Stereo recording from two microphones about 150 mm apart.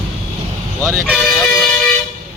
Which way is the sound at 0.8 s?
5° right (ahead or behind).